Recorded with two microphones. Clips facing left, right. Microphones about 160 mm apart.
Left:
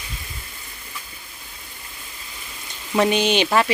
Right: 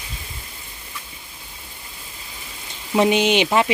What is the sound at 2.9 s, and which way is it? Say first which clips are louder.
Speech: right 2 dB; 20° right (ahead or behind).